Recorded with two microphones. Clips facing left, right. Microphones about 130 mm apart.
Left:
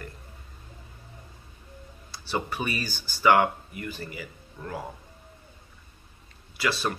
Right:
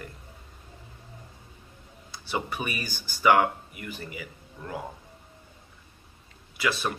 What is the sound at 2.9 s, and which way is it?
Speech, 55° right (ahead or behind).